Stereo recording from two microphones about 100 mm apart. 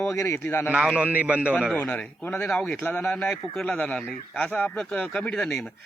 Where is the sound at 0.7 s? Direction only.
10° right (ahead or behind).